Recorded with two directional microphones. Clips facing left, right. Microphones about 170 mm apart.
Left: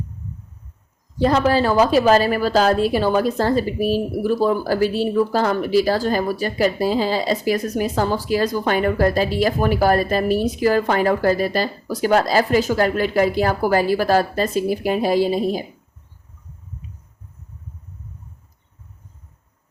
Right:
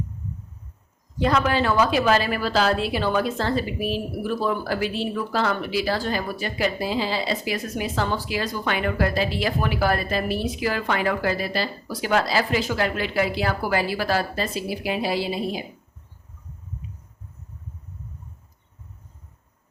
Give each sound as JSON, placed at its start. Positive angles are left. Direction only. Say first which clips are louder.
{"t": 1.2, "sound": "a woman's voice", "louder": "left 5 dB", "side_deg": 35}